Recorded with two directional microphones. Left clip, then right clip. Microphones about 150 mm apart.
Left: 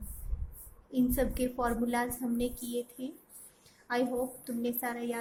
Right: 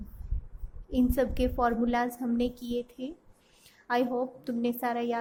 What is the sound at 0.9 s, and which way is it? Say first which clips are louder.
A woman's voice: right 3 dB; 55° right (ahead or behind).